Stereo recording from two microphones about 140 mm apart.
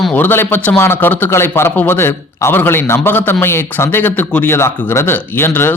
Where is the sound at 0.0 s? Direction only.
10° left (ahead or behind).